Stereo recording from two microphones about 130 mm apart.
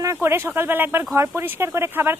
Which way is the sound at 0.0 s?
20° right (ahead or behind).